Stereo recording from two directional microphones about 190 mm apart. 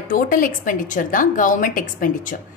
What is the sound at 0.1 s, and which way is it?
A woman's voice, 45° left (ahead or behind).